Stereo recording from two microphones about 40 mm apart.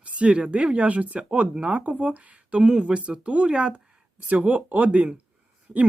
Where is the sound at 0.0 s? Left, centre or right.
Right.